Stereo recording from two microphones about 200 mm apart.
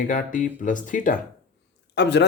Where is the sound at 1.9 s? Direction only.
60° left (ahead or behind).